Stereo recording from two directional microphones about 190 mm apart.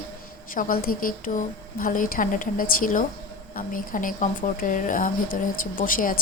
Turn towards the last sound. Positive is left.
turn(degrees=45)  # may be behind; listen again after turning